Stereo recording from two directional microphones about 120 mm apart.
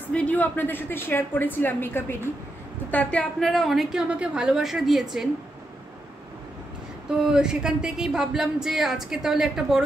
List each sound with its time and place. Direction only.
0.1 s a woman's voice: 10° left (ahead or behind)
7.2 s speech: 5° right (ahead or behind)